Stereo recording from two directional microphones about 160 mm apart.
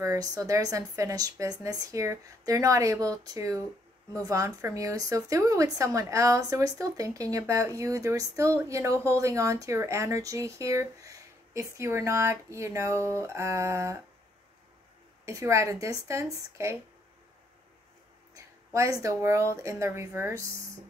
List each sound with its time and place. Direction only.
0.0 s speech: 20° right (ahead or behind)
15.2 s speech: 20° right (ahead or behind)
18.3 s speech: 20° right (ahead or behind)